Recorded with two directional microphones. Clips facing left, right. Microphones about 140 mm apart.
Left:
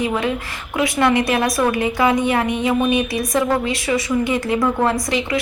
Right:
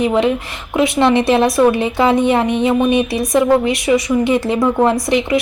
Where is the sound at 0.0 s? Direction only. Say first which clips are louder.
Right 6 dB; 20° right (ahead or behind).